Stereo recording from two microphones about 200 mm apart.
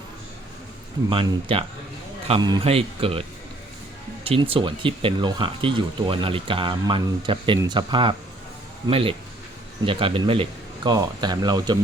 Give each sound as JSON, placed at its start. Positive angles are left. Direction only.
{"t": 1.1, "sound": "speech", "side_deg": -25}